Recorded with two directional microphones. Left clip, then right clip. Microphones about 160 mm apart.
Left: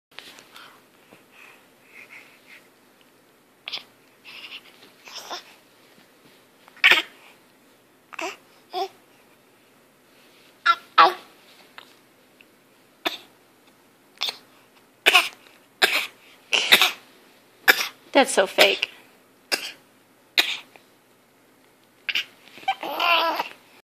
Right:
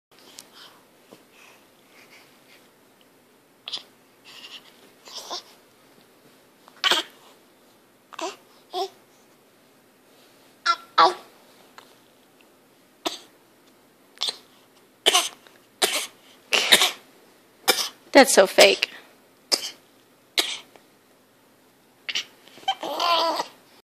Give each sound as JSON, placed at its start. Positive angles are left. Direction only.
{"t": 3.6, "sound": "babbling", "side_deg": -20}
{"t": 6.8, "sound": "cat", "side_deg": -25}
{"t": 8.2, "sound": "a sound", "side_deg": -25}
{"t": 10.6, "sound": "a sound", "side_deg": -25}
{"t": 14.2, "sound": "chewing", "side_deg": -35}
{"t": 15.0, "sound": "cough", "side_deg": -20}
{"t": 18.1, "sound": "a woman's voice", "side_deg": -50}
{"t": 19.5, "sound": "cough", "side_deg": -20}
{"t": 22.0, "sound": "laughter", "side_deg": -25}